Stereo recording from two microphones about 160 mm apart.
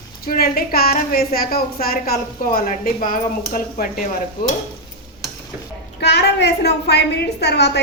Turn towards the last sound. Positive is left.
turn(degrees=90)